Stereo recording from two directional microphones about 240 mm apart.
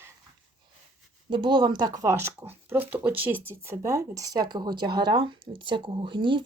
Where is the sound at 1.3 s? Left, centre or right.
Centre.